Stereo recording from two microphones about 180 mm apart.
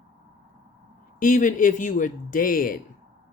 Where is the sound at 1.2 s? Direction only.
45° left (ahead or behind).